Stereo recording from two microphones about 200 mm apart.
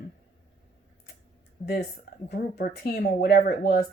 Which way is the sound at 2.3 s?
50° left (ahead or behind).